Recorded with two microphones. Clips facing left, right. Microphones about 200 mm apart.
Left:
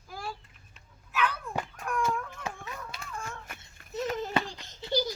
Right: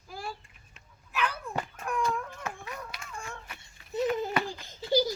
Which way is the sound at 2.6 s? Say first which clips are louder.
Even; 25° left (ahead or behind).